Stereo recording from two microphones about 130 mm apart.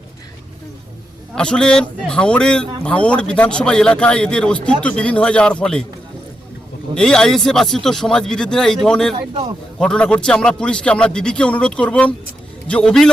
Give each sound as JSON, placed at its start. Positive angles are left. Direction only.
{"t": 1.4, "sound": "a man's voice", "side_deg": 5}
{"t": 6.9, "sound": "a man's voice", "side_deg": 5}
{"t": 9.1, "sound": "a man's voice", "side_deg": -40}
{"t": 9.7, "sound": "a man's voice", "side_deg": 5}